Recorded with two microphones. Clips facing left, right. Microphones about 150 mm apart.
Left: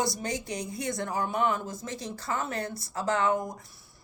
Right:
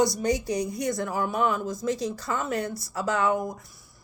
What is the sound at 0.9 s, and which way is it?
Speech, 20° left (ahead or behind).